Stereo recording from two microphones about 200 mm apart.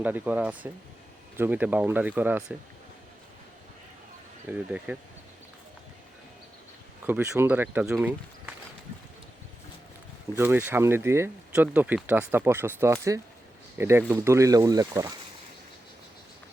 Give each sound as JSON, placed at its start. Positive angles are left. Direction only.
{"t": 0.0, "sound": "speech", "side_deg": -10}
{"t": 4.4, "sound": "speech", "side_deg": -5}
{"t": 7.0, "sound": "speech", "side_deg": -10}
{"t": 10.3, "sound": "speech", "side_deg": -10}